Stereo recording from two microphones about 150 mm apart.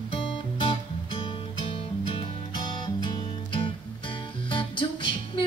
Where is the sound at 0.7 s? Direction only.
35° left (ahead or behind).